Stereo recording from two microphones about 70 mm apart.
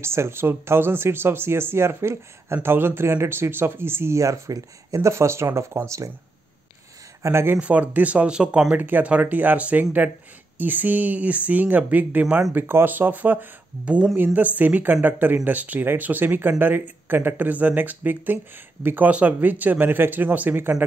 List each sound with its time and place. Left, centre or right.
0.0 s speech: right
7.2 s speech: right
7.5 s speech: centre